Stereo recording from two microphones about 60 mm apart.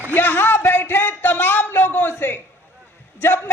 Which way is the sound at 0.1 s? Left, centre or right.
Left.